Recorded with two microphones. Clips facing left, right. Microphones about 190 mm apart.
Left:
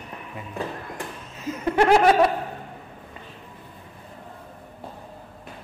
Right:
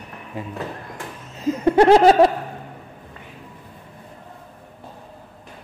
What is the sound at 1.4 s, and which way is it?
Laughter, 35° right (ahead or behind).